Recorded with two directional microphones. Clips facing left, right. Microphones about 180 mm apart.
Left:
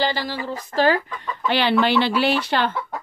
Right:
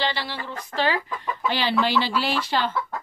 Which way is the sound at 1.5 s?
65° left (ahead or behind).